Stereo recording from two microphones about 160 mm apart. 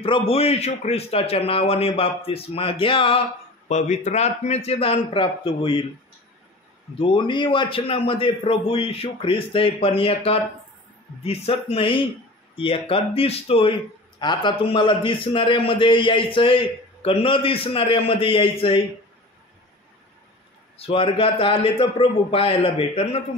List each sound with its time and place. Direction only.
0.0 s a man's voice: 35° left (ahead or behind)
3.6 s a man's voice: 45° left (ahead or behind)
7.0 s a man's voice: 30° left (ahead or behind)
20.7 s a man's voice: 35° left (ahead or behind)